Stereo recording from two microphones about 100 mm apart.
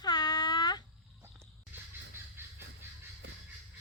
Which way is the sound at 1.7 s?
20° right (ahead or behind).